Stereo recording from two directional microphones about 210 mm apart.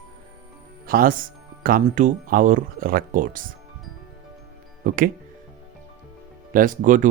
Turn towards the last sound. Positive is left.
turn(degrees=-40)  # may be behind; listen again after turning